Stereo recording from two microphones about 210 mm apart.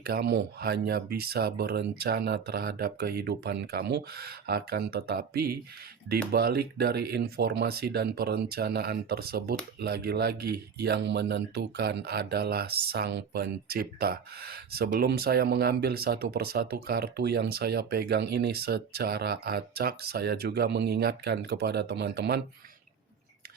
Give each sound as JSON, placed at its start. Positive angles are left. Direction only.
{"t": 0.0, "sound": "speech", "side_deg": -50}